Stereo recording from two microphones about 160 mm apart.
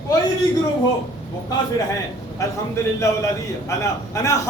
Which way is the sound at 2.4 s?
20° left (ahead or behind).